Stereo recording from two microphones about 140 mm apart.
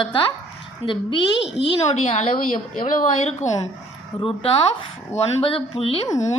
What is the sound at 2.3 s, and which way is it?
A woman's voice, 65° left (ahead or behind).